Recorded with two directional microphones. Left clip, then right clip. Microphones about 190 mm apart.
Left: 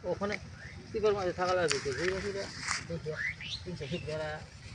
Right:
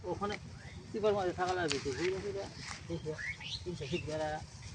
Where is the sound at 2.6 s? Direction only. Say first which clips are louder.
Left 10 dB; 70° left (ahead or behind).